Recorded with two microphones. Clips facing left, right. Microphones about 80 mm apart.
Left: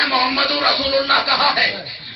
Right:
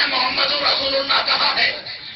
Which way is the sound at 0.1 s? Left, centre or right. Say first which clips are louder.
Left 4 dB; left.